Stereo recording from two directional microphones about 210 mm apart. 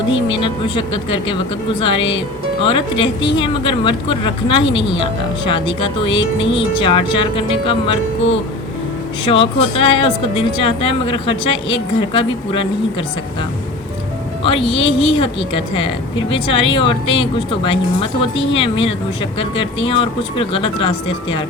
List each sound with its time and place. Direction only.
0.1 s speech: 25° left (ahead or behind)
9.2 s speech: 25° left (ahead or behind)
14.4 s speech: 25° left (ahead or behind)